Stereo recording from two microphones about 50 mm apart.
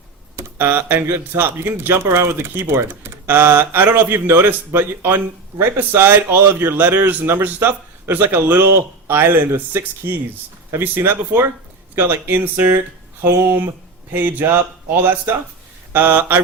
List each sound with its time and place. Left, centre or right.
0.6 s speech: right
10.0 s speech: right